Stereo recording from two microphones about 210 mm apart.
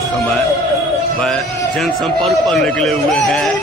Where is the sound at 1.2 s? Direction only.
5° left (ahead or behind).